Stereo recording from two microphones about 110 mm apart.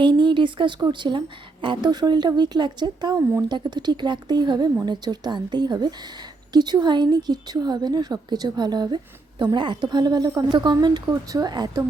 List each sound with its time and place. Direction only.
0.0 s a woman's voice: 45° right (ahead or behind)